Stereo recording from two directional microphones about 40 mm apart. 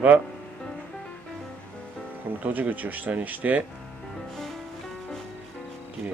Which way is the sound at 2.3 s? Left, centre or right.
Right.